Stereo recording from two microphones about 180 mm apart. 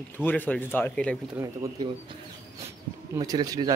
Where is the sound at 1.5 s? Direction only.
20° right (ahead or behind).